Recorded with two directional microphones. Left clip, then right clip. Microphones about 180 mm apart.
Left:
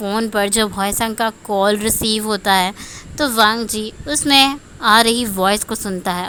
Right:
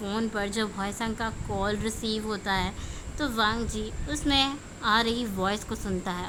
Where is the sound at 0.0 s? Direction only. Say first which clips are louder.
Left 12 dB; 25° left (ahead or behind).